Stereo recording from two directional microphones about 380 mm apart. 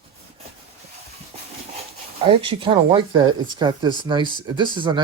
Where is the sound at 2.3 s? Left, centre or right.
Centre.